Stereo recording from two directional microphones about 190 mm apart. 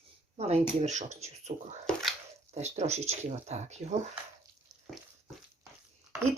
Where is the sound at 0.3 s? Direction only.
35° right (ahead or behind).